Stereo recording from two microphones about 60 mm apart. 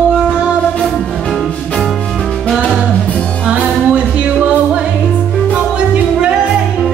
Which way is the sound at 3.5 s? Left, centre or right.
Right.